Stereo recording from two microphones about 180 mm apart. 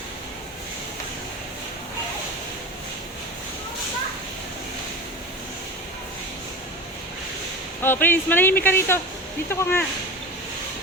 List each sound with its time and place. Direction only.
7.8 s speech: 10° left (ahead or behind)